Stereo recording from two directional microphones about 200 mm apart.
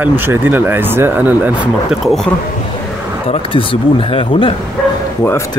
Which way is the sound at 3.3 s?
25° left (ahead or behind).